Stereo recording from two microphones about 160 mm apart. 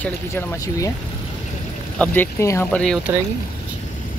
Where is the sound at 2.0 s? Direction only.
15° left (ahead or behind).